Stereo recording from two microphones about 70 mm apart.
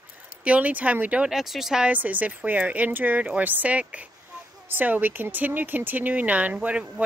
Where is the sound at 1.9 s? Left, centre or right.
Right.